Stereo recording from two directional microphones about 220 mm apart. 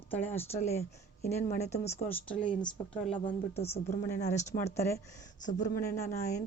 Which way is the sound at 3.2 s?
30° left (ahead or behind).